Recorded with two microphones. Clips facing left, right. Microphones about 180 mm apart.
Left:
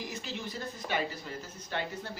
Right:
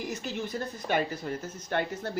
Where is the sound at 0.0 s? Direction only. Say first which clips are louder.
Right 5 dB; 50° right (ahead or behind).